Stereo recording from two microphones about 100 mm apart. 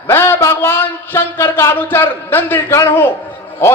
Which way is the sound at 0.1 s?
25° left (ahead or behind).